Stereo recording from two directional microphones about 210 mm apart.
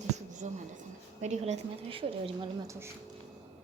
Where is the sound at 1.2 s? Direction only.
35° right (ahead or behind).